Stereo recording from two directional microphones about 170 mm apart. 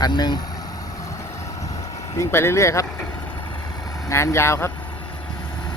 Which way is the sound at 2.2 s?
15° left (ahead or behind).